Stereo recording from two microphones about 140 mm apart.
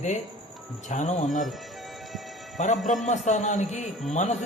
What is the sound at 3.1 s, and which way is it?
Speech, 60° left (ahead or behind).